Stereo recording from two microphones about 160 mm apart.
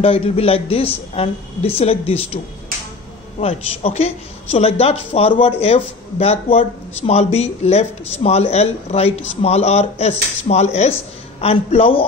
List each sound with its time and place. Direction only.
0.0 s speech: 35° left (ahead or behind)